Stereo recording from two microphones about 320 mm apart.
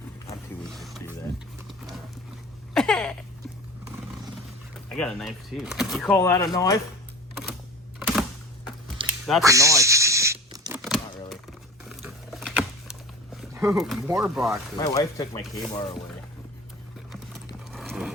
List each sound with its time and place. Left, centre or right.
0.3 s music: centre
2.7 s a sound: centre
4.9 s speech: centre
7.9 s typewriter: centre
9.0 s a sound: centre
10.8 s typewriter: centre
11.9 s a sound: centre
14.8 s speech: centre
17.1 s horse: centre